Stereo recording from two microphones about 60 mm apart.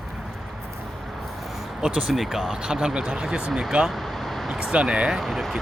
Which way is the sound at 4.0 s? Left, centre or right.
Centre.